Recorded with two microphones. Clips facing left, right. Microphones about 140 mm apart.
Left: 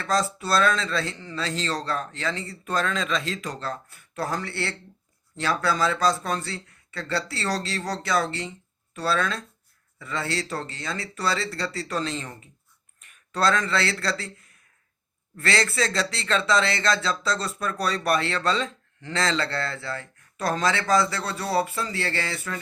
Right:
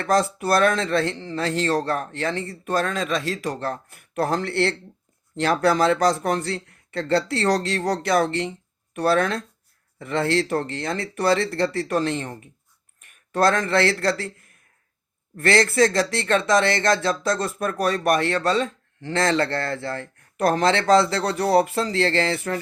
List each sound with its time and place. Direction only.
0.0 s speech: 55° right (ahead or behind)
1.1 s speech: 25° right (ahead or behind)
1.5 s speech: 55° right (ahead or behind)
13.3 s speech: 50° right (ahead or behind)
15.4 s speech: 50° right (ahead or behind)